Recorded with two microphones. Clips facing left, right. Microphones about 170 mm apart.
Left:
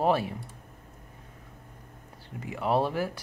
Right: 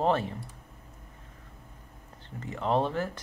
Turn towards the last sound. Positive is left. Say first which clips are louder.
# left 1 dB
turn(degrees=10)  # may be behind; listen again after turning